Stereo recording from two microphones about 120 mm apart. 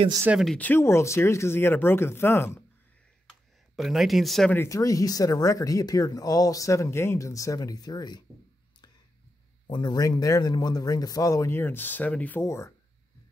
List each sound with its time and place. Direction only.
0.6 s speech: 15° left (ahead or behind)
3.3 s a sound: centre (ahead or behind)
4.6 s speech: 30° left (ahead or behind)
9.7 s speech: 35° left (ahead or behind)